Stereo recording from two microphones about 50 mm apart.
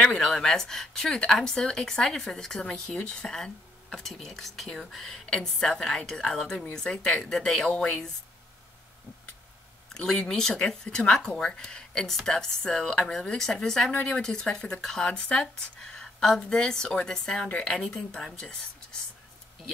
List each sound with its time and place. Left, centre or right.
0.0 s speech: centre
9.9 s speech: centre